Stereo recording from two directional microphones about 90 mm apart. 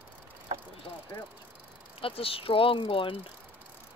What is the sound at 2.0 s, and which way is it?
Speech, 90° left.